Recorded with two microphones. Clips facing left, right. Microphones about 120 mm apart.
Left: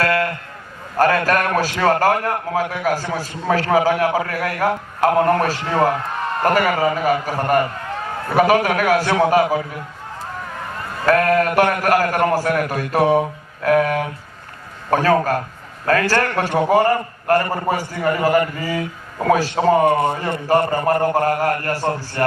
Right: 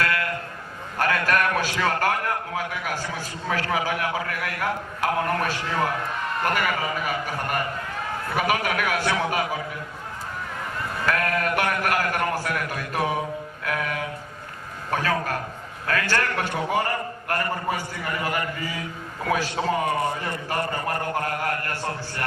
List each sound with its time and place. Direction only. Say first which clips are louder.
0.0 s music: left 7 dB; 40° left (ahead or behind)
0.9 s a man's voice: left 7 dB; 40° left (ahead or behind)
11.0 s a man's voice: left 10 dB; 40° left (ahead or behind)